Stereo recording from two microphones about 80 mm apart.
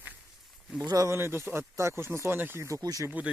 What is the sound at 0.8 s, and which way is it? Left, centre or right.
Speech, right.